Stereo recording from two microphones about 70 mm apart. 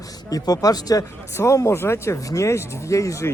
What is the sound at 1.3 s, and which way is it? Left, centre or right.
Speech, left.